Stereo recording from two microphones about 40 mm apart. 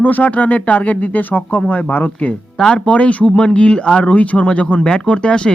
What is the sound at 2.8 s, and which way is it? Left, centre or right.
Speech, left.